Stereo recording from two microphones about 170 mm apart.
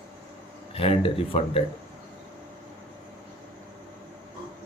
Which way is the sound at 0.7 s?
35° left (ahead or behind).